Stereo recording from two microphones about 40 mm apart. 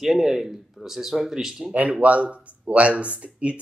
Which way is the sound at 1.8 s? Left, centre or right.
Right.